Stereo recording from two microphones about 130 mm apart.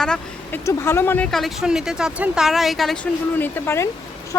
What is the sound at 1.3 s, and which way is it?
Speech, centre (ahead or behind).